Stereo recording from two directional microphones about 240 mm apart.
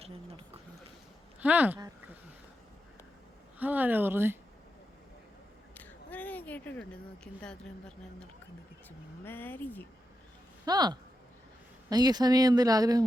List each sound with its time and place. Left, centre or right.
1.4 s speech: centre
3.6 s speech: centre
5.7 s a sound: centre
9.2 s speech: centre
10.7 s speech: centre